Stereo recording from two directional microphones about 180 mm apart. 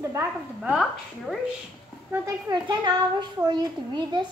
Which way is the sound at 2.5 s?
25° right (ahead or behind).